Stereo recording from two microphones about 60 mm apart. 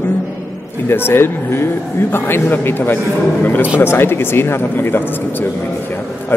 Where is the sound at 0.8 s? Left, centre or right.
Left.